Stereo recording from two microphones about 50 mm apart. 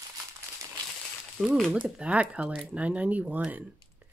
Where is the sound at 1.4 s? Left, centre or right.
Right.